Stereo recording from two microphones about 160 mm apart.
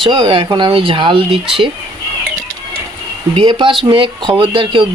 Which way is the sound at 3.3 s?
30° right (ahead or behind).